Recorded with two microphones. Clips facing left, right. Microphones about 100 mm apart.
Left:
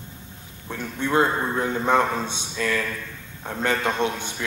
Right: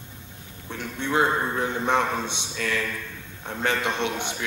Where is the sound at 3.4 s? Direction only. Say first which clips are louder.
Left 2 dB; 40° left (ahead or behind).